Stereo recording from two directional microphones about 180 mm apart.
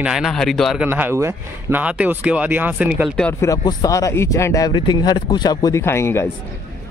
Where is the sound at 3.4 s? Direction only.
20° left (ahead or behind).